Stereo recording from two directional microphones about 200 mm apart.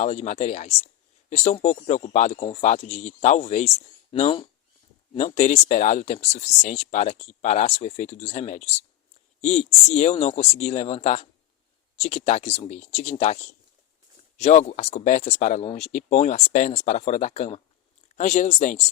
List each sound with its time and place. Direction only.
0.0 s speech: 35° left (ahead or behind)